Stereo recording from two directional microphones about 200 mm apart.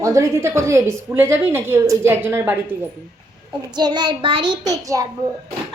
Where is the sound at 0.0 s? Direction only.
15° right (ahead or behind).